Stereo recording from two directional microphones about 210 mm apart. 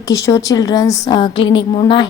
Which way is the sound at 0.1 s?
15° left (ahead or behind).